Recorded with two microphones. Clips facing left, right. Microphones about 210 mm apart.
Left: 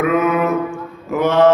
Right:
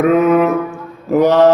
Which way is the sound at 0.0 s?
35° right (ahead or behind).